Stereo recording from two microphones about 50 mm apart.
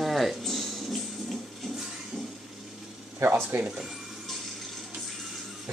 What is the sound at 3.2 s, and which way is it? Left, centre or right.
Speech, right.